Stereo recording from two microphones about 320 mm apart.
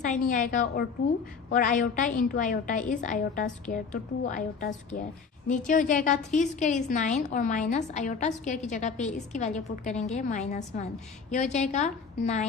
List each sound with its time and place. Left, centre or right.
0.0 s a woman's voice: left